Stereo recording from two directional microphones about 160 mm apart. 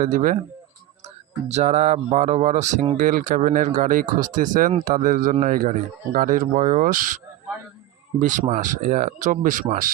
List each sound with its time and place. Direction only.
0.0 s speech: 55° right (ahead or behind)
1.0 s speech: 45° right (ahead or behind)
3.0 s speech: 60° right (ahead or behind)
8.2 s speech: 50° right (ahead or behind)